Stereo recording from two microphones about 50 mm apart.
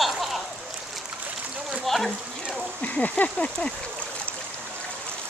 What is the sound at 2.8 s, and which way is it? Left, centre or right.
Speech, left.